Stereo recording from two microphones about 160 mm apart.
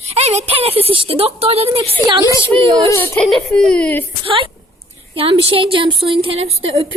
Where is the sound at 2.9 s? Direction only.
15° left (ahead or behind).